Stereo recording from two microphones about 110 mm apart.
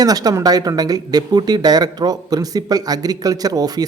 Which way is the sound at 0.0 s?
35° right (ahead or behind).